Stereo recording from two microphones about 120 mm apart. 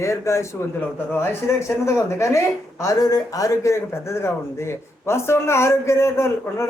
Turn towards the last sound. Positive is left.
turn(degrees=25)  # may be behind; listen again after turning